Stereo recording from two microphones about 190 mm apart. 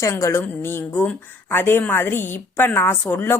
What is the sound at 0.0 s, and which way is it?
A woman's voice, 15° left (ahead or behind).